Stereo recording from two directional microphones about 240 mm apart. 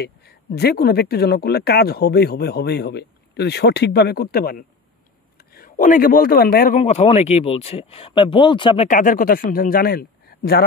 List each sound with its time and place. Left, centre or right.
0.0 s speech: left
6.8 s speech: left
8.8 s speech: left